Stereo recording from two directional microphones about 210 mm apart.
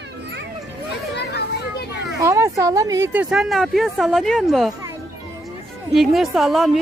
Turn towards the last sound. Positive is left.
turn(degrees=0)  # may be behind; listen again after turning